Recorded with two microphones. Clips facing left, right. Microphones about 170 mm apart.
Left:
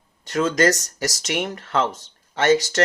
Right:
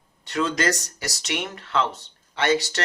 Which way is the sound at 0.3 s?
45° left (ahead or behind).